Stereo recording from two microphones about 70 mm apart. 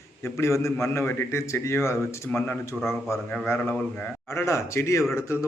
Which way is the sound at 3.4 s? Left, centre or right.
Left.